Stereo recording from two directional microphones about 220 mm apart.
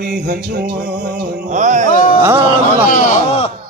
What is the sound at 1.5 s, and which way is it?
Music, 35° right (ahead or behind).